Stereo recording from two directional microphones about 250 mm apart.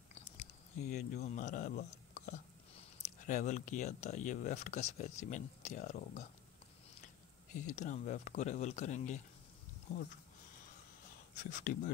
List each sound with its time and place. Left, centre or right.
0.1 s chewing: left
3.3 s speech: left
7.6 s speech: left
11.5 s speech: left